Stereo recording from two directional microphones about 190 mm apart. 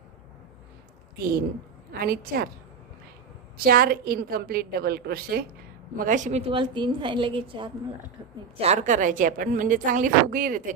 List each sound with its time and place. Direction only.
1.9 s speech: 50° right (ahead or behind)
3.6 s speech: 50° right (ahead or behind)
6.0 s a woman's voice: 40° right (ahead or behind)